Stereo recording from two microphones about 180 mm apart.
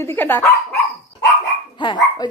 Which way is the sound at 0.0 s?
10° left (ahead or behind).